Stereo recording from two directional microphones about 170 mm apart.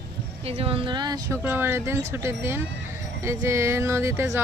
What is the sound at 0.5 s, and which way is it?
Speech, 35° right (ahead or behind).